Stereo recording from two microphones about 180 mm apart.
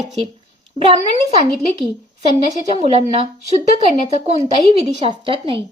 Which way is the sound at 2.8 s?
35° right (ahead or behind).